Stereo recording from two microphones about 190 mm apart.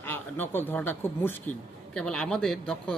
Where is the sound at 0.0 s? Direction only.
10° left (ahead or behind).